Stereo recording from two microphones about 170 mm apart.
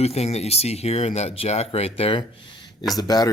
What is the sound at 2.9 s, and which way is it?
Speech, 20° left (ahead or behind).